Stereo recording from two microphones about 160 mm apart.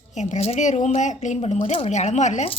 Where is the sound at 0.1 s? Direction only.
45° left (ahead or behind).